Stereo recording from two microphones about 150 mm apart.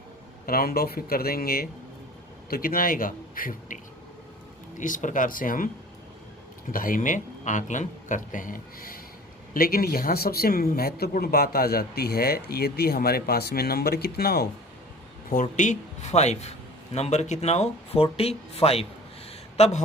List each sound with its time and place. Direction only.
0.4 s speech: 80° left
2.5 s a man's voice: 75° left (ahead or behind)
4.8 s speech: 60° left (ahead or behind); by 14.4 s 90° left
15.3 s a man's voice: 60° left (ahead or behind); by 19.8 s 45° left (ahead or behind)